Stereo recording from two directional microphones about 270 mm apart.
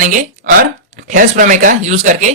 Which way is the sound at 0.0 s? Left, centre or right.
Right.